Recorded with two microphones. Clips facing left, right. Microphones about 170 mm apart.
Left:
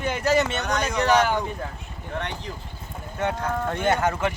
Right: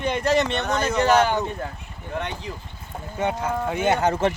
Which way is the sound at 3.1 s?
10° right (ahead or behind).